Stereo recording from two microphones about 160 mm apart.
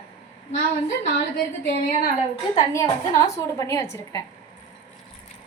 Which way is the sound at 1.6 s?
70° left (ahead or behind).